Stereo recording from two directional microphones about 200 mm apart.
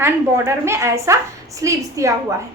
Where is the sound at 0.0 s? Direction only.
15° right (ahead or behind).